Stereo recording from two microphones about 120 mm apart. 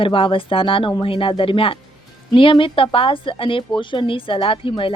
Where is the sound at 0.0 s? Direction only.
45° left (ahead or behind).